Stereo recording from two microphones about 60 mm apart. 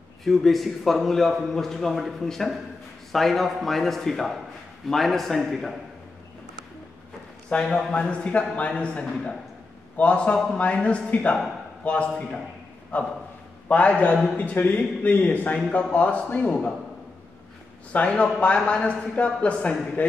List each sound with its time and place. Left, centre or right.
0.2 s a man's voice: centre
7.4 s a man's voice: centre
17.9 s a man's voice: centre